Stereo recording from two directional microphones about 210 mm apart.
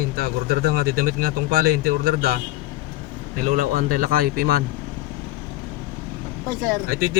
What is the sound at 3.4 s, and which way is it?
Speech, 40° right (ahead or behind).